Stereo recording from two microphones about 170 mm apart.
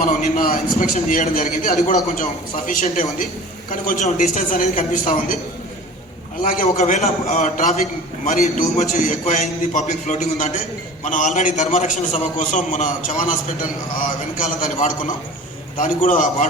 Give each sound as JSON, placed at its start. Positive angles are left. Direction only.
{"t": 0.0, "sound": "a man's voice", "side_deg": 55}
{"t": 6.4, "sound": "a man's voice", "side_deg": 55}